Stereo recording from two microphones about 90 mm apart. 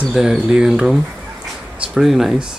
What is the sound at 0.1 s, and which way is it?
Speech, 5° right (ahead or behind).